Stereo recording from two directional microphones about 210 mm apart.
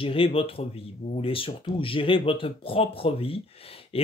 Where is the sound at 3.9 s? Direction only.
25° left (ahead or behind).